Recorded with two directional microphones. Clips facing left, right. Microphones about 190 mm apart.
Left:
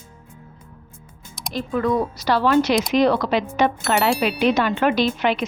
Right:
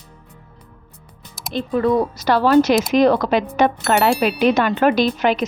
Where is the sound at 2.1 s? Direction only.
55° right (ahead or behind).